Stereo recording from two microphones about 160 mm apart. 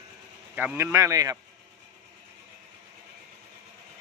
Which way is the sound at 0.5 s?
10° right (ahead or behind).